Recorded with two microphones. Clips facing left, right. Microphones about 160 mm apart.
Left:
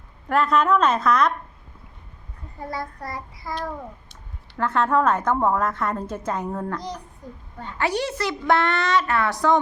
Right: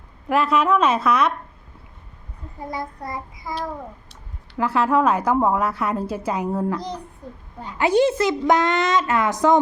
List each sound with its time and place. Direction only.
0.3 s a woman's voice: 5° right (ahead or behind)
2.6 s a child's voice: 20° right (ahead or behind)
4.5 s a woman's voice: 10° right (ahead or behind)
7.9 s a child's voice: 25° right (ahead or behind)